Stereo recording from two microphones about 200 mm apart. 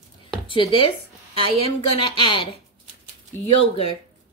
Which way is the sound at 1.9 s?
25° left (ahead or behind).